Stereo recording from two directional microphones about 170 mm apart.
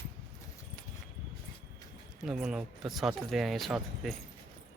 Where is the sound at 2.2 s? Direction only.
5° right (ahead or behind).